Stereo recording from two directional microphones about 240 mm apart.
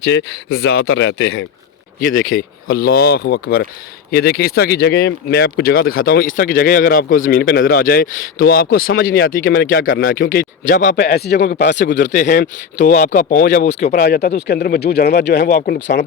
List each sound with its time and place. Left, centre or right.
0.0 s speech: left
2.0 s speech: left
11.9 s speech: left